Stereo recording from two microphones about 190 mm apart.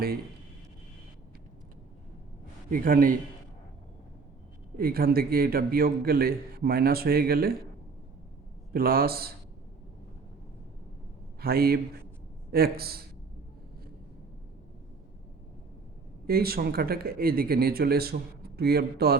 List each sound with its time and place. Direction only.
2.6 s speech: 50° right (ahead or behind)
4.8 s speech: 50° right (ahead or behind)
8.7 s speech: 50° right (ahead or behind)
11.3 s a man's voice: 55° right (ahead or behind)
16.2 s speech: 55° right (ahead or behind)